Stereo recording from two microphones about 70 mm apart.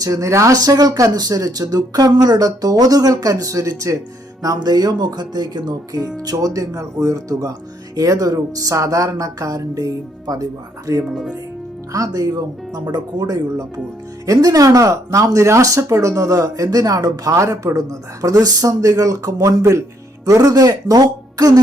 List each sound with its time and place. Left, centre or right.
0.0 s speech: right
0.6 s speech: right
4.4 s speech: right